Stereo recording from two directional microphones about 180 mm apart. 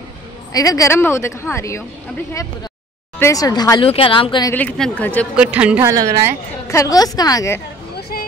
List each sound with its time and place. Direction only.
0.5 s a woman's voice: 20° left (ahead or behind)
3.2 s a woman's voice: 20° left (ahead or behind)
4.5 s a woman's voice: 10° left (ahead or behind)
5.3 s a woman's voice: 5° right (ahead or behind)
6.7 s a woman's voice: 20° left (ahead or behind)